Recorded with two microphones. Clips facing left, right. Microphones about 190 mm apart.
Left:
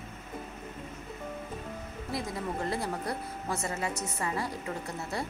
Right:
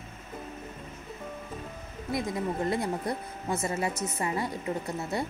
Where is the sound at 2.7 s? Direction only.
20° right (ahead or behind).